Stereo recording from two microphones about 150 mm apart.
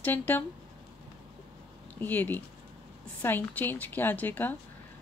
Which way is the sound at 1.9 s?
10° left (ahead or behind).